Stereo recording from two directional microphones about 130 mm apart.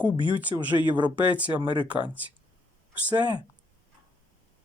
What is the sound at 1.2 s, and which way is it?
Speech, 10° right (ahead or behind).